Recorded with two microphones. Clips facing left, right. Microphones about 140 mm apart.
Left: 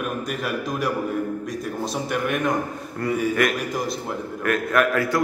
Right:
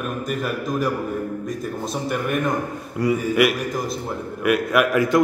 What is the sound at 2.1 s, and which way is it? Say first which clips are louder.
Speech: right 1 dB; centre (ahead or behind).